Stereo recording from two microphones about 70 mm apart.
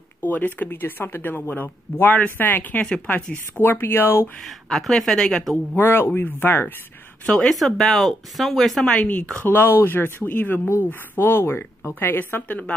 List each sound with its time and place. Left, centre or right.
0.2 s speech: left
2.9 s speech: centre
3.5 s speech: left
4.4 s speech: centre
5.8 s speech: left
7.2 s speech: centre
8.9 s speech: centre
9.5 s speech: left